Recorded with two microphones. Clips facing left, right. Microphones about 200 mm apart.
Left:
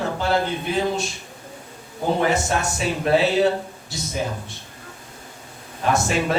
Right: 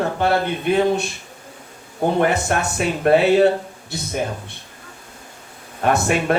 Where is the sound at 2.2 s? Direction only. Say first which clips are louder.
Right 2 dB; 60° right (ahead or behind).